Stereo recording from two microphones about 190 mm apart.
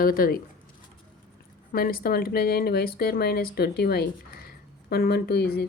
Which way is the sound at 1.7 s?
50° left (ahead or behind).